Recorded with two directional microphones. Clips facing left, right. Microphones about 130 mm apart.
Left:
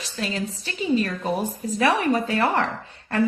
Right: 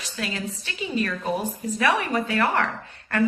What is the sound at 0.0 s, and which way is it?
A woman's voice, 35° left (ahead or behind).